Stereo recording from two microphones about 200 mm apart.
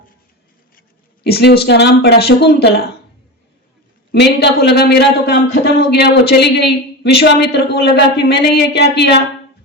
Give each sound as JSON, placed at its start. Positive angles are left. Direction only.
{"t": 0.8, "sound": "speech", "side_deg": 55}
{"t": 4.1, "sound": "a man's voice", "side_deg": 55}